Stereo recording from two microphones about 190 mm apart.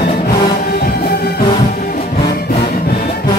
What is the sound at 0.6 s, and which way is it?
Music, 55° left (ahead or behind).